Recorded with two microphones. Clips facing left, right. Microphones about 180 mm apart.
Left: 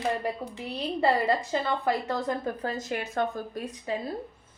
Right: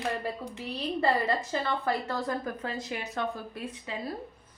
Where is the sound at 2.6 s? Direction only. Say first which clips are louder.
Left 4 dB; 45° left (ahead or behind).